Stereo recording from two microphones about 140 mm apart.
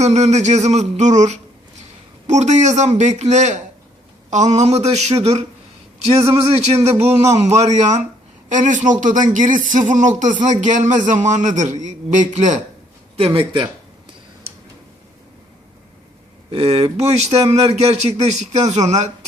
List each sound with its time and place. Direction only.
0.0 s speech: 55° right (ahead or behind)
6.1 s a man's voice: 20° right (ahead or behind)
6.5 s speech: 45° right (ahead or behind)
6.8 s a man's voice: 20° right (ahead or behind)
7.3 s speech: 55° right (ahead or behind)
13.1 s speech: 40° right (ahead or behind)
16.5 s speech: 40° right (ahead or behind)